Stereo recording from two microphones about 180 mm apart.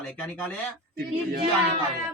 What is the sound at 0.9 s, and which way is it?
Speech, 55° right (ahead or behind).